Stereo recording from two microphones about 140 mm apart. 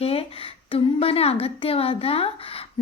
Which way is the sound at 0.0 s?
45° left (ahead or behind).